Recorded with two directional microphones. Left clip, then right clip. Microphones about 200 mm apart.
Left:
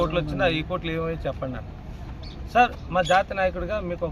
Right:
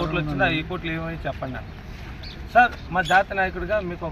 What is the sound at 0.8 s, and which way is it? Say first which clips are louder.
Speech: left 1 dB; 30° left (ahead or behind).